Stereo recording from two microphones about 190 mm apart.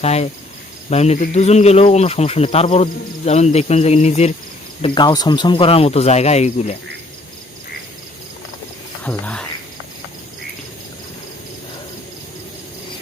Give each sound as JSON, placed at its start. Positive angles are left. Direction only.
{"t": 0.0, "sound": "insect", "side_deg": 35}
{"t": 4.8, "sound": "insect", "side_deg": 25}
{"t": 9.0, "sound": "speech", "side_deg": 5}